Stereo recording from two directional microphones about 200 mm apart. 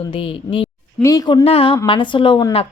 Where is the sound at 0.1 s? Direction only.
25° left (ahead or behind).